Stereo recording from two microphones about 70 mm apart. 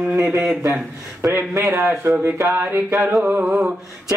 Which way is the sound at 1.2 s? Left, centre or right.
Right.